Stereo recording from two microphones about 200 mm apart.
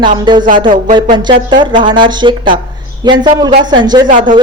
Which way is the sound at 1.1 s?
25° right (ahead or behind).